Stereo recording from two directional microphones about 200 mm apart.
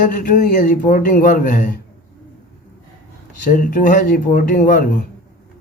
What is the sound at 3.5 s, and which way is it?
Speech, 45° left (ahead or behind).